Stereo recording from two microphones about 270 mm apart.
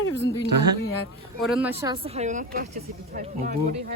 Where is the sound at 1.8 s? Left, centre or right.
Centre.